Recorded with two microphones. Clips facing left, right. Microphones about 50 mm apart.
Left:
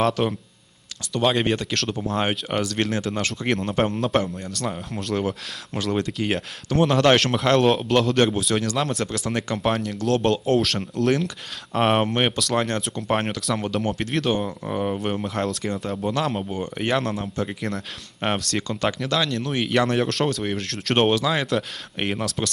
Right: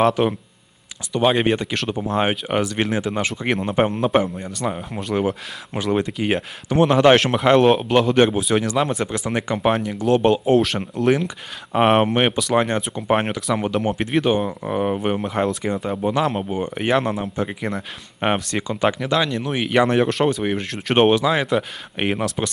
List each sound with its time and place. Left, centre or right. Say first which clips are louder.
0.0 s speech: right 4 dB; centre